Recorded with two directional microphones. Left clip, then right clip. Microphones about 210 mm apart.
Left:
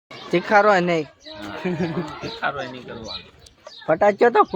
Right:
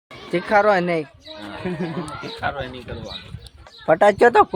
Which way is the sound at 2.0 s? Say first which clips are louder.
Even; 5° right (ahead or behind).